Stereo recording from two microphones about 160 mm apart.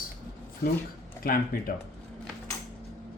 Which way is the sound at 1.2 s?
65° left (ahead or behind).